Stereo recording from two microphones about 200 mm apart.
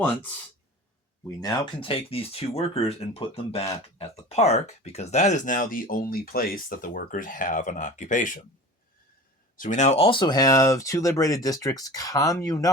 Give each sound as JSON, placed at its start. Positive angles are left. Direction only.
{"t": 1.4, "sound": "speech", "side_deg": 20}
{"t": 9.6, "sound": "speech", "side_deg": 40}